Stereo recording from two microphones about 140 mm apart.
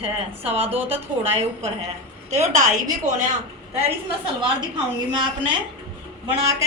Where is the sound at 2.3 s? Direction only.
60° right (ahead or behind).